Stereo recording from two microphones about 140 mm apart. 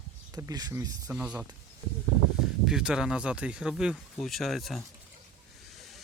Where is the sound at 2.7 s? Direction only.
5° right (ahead or behind).